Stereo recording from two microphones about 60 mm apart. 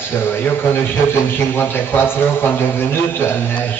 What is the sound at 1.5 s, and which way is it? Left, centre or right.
A woman's voice, left.